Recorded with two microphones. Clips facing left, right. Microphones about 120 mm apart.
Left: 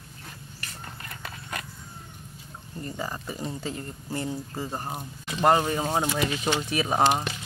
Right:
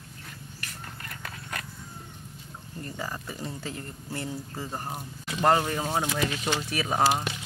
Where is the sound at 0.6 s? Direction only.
20° left (ahead or behind).